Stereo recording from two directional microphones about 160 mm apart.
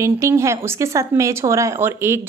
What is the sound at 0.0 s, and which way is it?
A woman's voice, 20° right (ahead or behind).